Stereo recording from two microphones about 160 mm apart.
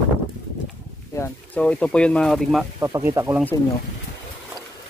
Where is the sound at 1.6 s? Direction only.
5° left (ahead or behind).